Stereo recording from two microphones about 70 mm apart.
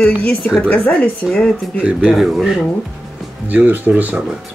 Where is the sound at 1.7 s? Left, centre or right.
Centre.